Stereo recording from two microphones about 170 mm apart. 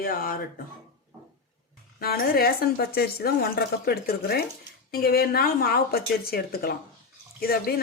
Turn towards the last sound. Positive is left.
turn(degrees=60)  # may be behind; listen again after turning